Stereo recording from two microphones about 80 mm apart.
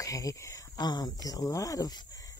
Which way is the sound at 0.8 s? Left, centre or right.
Left.